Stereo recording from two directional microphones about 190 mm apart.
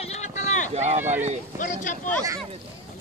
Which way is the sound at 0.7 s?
35° right (ahead or behind).